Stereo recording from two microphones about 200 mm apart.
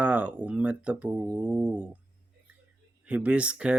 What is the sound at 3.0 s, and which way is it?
Speech, 5° right (ahead or behind).